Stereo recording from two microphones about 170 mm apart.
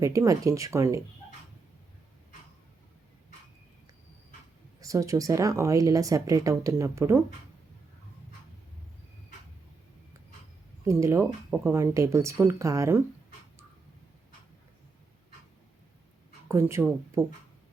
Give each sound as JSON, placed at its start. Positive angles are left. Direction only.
{"t": 0.0, "sound": "speech", "side_deg": -20}
{"t": 4.8, "sound": "speech", "side_deg": -20}
{"t": 10.8, "sound": "speech", "side_deg": -15}
{"t": 16.5, "sound": "speech", "side_deg": -15}